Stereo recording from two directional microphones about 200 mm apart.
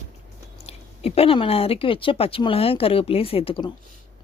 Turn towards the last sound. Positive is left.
turn(degrees=25)  # may be behind; listen again after turning